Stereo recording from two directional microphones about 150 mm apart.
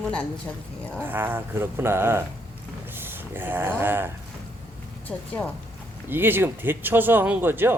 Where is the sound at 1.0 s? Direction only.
15° right (ahead or behind).